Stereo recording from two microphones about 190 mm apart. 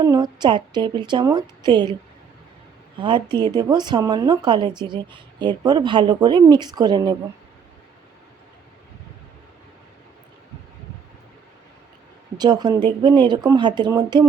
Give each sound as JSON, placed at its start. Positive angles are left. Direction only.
{"t": 0.0, "sound": "speech", "side_deg": -20}
{"t": 3.0, "sound": "speech", "side_deg": -25}
{"t": 12.4, "sound": "speech", "side_deg": -20}